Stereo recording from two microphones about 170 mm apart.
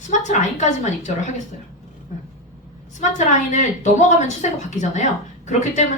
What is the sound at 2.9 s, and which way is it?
A woman's voice, 45° left (ahead or behind).